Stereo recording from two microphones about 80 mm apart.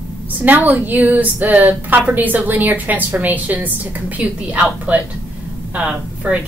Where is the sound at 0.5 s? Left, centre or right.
Right.